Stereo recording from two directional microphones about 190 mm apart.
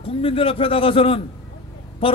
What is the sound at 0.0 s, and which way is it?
A man's voice, 30° left (ahead or behind).